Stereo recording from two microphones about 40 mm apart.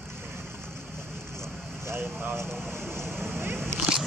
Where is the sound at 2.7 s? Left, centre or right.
Right.